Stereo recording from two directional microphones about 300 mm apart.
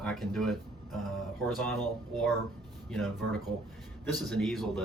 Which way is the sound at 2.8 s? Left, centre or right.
Centre.